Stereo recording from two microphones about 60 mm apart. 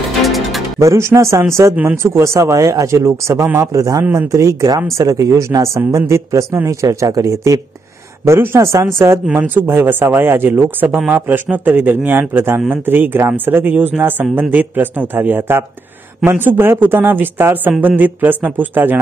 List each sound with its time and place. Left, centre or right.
0.2 s music: centre
0.7 s a man's voice: right
8.3 s speech: right
9.3 s speech: right